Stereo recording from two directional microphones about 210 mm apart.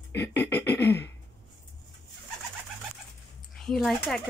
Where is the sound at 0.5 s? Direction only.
10° left (ahead or behind).